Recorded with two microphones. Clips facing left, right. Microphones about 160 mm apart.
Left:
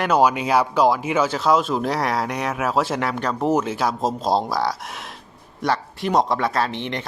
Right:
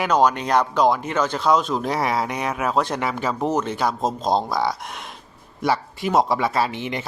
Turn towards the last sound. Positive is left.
turn(degrees=-5)  # may be behind; listen again after turning